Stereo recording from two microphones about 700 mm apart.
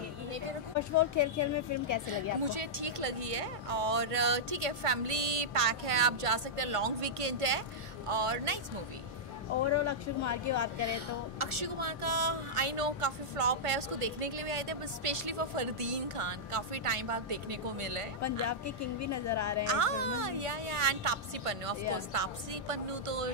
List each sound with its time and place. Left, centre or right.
0.7 s speech: left
2.4 s speech: right
9.7 s speech: left
10.9 s speech: right
18.5 s speech: left
19.6 s speech: right